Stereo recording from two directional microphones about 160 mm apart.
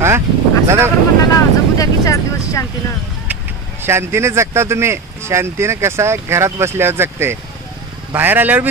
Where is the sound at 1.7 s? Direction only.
20° left (ahead or behind).